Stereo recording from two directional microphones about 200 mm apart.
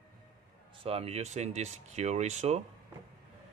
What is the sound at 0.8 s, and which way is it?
Speech, 30° right (ahead or behind).